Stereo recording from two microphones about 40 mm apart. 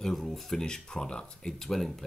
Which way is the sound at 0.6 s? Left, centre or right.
Centre.